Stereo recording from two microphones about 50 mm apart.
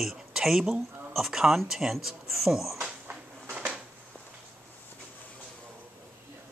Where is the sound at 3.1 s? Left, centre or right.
Right.